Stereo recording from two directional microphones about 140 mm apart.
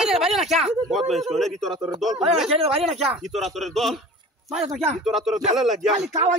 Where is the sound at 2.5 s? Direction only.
45° right (ahead or behind).